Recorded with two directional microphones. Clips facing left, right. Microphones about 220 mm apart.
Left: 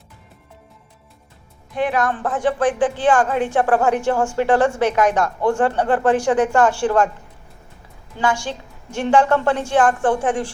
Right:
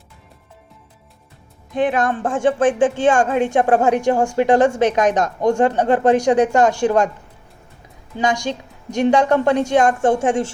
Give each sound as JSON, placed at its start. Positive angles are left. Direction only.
{"t": 1.7, "sound": "a woman's voice", "side_deg": -20}
{"t": 3.4, "sound": "a woman's voice", "side_deg": -15}
{"t": 8.2, "sound": "a woman's voice", "side_deg": -15}